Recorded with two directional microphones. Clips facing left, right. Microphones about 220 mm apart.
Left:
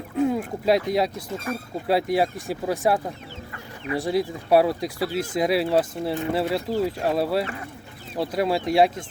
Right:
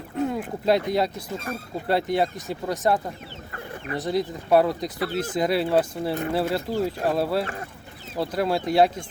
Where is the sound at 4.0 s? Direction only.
5° left (ahead or behind).